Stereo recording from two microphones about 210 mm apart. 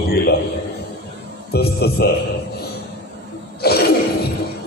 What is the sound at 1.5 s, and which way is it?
Speech, 50° left (ahead or behind).